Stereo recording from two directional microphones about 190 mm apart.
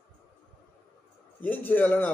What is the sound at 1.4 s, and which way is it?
Speech, 10° left (ahead or behind).